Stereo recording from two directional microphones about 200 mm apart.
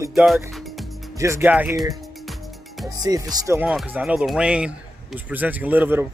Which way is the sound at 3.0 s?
20° right (ahead or behind).